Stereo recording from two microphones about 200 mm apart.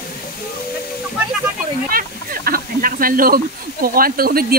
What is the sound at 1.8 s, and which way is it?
Speech, 45° right (ahead or behind).